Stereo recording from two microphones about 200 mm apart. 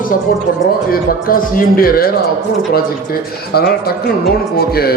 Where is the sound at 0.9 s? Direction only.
45° left (ahead or behind).